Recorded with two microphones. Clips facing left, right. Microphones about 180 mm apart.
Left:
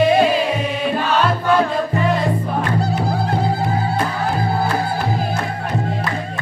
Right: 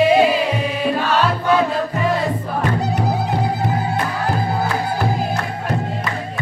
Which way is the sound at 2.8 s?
20° right (ahead or behind).